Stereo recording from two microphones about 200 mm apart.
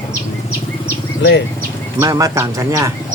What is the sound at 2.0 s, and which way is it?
Speech, 15° right (ahead or behind).